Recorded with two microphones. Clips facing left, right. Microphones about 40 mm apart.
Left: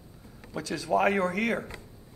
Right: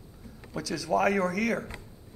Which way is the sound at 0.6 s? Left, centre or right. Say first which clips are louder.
Left 1 dB; left.